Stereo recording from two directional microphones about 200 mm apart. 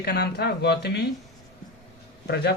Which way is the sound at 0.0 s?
55° left (ahead or behind).